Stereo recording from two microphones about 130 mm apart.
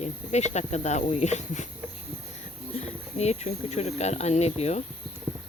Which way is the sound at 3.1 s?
55° left (ahead or behind).